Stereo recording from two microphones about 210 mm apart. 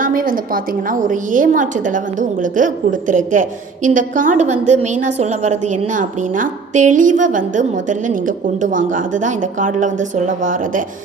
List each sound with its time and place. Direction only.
0.0 s a woman's voice: 40° right (ahead or behind)